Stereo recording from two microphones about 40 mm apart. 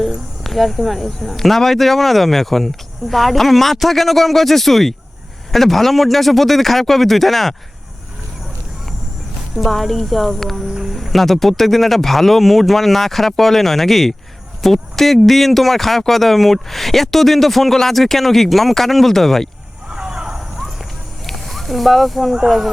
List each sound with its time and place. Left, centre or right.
0.4 s speech: centre
9.6 s speech: centre
19.9 s vehicle: centre
21.2 s a sound: centre
22.4 s speech: centre